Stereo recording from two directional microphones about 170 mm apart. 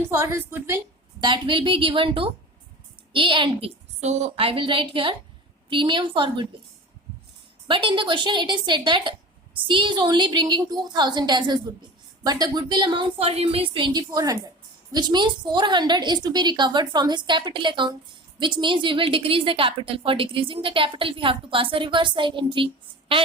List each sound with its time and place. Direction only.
0.1 s a woman's voice: 15° right (ahead or behind)
1.2 s a woman's voice: 30° right (ahead or behind)
7.7 s a woman's voice: 30° right (ahead or behind)